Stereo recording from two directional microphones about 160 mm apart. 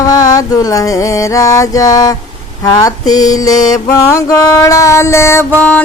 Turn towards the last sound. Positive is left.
turn(degrees=10)  # may be behind; listen again after turning